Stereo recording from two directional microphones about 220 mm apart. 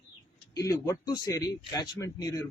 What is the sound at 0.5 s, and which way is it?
A man's voice, 15° left (ahead or behind).